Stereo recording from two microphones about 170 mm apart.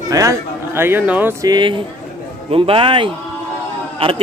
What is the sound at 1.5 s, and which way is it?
A man's voice, 25° right (ahead or behind).